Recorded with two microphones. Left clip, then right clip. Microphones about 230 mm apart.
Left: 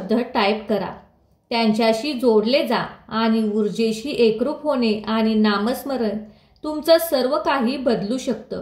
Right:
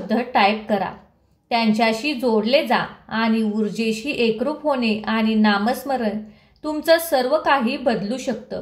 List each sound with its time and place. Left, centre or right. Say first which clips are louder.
0.3 s a woman's voice: right 5 dB; right